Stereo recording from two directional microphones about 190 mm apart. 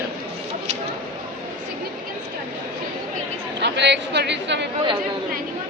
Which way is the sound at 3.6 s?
65° right (ahead or behind).